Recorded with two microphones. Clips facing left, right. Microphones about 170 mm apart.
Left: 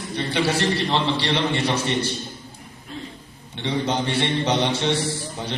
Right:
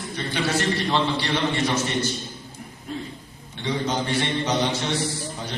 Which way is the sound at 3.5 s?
25° left (ahead or behind).